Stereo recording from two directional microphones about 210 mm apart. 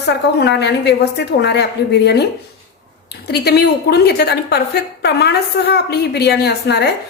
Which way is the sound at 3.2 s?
50° left (ahead or behind).